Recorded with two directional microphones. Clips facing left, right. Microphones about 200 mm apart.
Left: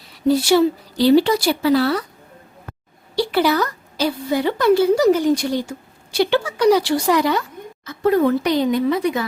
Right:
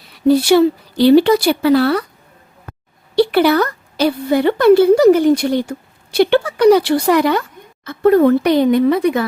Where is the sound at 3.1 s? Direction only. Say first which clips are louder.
Right 6 dB; 60° right (ahead or behind).